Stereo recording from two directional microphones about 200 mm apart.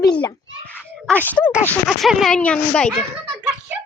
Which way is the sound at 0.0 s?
20° left (ahead or behind).